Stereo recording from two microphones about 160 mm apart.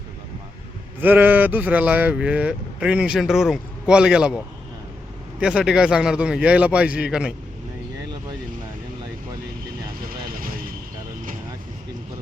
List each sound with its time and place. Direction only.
1.0 s speech: 10° right (ahead or behind)
5.4 s a man's voice: 5° right (ahead or behind)
10.1 s vehicle: 65° right (ahead or behind)